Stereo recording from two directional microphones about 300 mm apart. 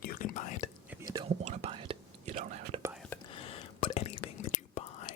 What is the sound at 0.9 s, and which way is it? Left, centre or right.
Whispering, centre.